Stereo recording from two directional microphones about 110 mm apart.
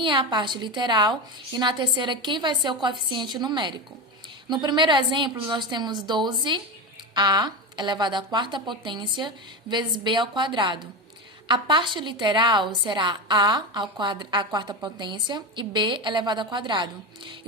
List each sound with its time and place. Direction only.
0.0 s a woman's voice: 45° right (ahead or behind)